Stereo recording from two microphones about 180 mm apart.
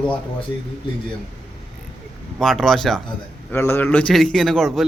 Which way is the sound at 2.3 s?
Centre (ahead or behind).